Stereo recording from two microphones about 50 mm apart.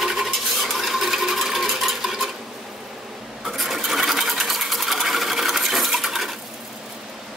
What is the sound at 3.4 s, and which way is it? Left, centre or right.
Sewing machine, centre.